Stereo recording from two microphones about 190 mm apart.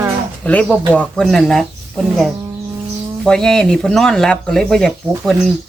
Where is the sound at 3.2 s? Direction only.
5° left (ahead or behind).